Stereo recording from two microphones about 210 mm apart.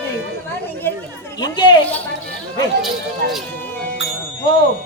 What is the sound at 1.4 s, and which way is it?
Speech, 20° left (ahead or behind).